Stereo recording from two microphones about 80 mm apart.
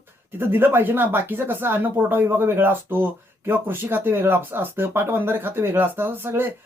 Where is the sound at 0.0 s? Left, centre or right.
Right.